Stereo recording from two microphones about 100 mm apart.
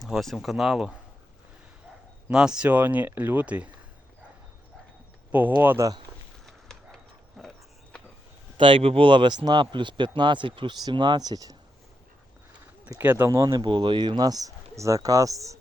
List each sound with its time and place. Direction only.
0.0 s speech: centre (ahead or behind)
2.3 s speech: 5° right (ahead or behind)
5.3 s speech: 20° right (ahead or behind)
6.4 s a sound: 5° left (ahead or behind)
8.5 s speech: 60° right (ahead or behind); by 11.5 s 40° right (ahead or behind)
13.0 s speech: 20° right (ahead or behind)
13.2 s speech: 35° right (ahead or behind)
13.6 s speech: 50° right (ahead or behind); by 15.5 s 35° right (ahead or behind)